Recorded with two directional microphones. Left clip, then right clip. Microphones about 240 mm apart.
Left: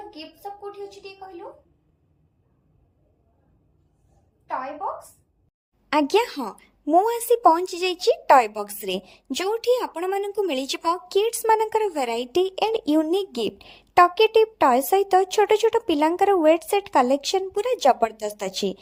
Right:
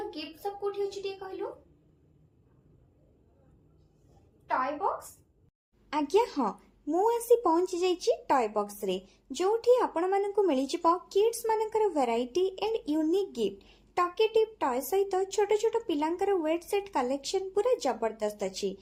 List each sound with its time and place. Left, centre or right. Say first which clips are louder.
0.1 s a woman's voice: even; centre
5.9 s a woman's voice: left 7 dB; left